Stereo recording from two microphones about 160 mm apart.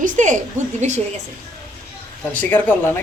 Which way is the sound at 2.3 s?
10° left (ahead or behind).